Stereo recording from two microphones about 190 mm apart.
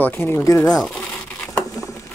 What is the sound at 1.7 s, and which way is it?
Patter, 15° left (ahead or behind).